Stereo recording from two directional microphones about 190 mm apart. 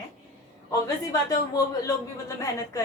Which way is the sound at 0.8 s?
20° left (ahead or behind).